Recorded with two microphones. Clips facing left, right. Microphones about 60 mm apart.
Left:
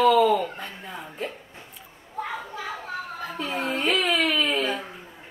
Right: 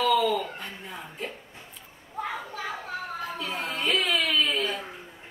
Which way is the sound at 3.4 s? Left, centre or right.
Left.